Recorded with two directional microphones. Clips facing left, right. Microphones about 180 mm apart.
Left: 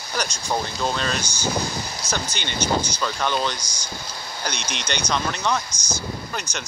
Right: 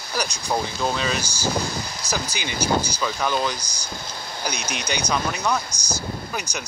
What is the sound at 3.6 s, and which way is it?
Speech, 35° right (ahead or behind).